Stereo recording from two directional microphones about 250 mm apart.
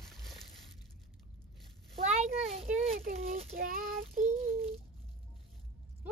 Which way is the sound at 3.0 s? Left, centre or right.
Right.